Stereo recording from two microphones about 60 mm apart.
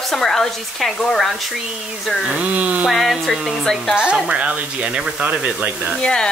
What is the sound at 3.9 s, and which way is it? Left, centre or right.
Speech, centre.